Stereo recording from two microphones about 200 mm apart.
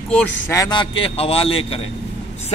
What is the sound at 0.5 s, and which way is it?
Speech, 20° left (ahead or behind).